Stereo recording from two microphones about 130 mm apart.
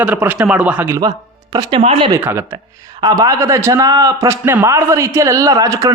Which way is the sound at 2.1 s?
20° right (ahead or behind).